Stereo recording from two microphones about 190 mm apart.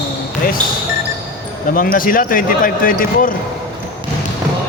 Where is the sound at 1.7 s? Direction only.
50° left (ahead or behind).